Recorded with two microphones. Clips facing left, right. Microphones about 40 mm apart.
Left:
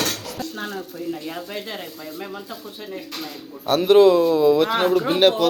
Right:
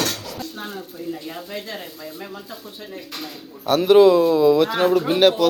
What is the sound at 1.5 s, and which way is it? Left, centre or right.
Speech, left.